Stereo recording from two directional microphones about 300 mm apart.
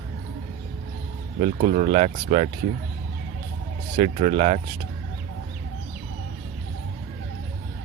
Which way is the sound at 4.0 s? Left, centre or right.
Right.